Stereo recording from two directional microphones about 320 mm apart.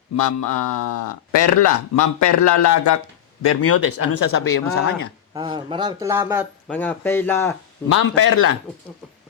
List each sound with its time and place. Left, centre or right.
0.2 s speech: left
3.4 s speech: left
5.3 s speech: centre
6.7 s speech: centre
7.9 s speech: left